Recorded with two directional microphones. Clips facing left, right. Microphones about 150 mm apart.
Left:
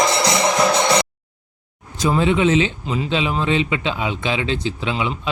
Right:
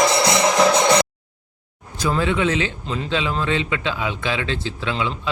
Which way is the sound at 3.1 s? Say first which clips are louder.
Left 2 dB; 20° left (ahead or behind).